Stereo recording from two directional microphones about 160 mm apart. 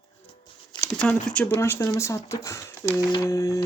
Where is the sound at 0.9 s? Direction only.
5° left (ahead or behind).